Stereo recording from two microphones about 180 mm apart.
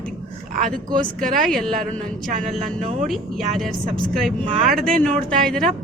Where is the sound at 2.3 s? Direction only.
40° right (ahead or behind).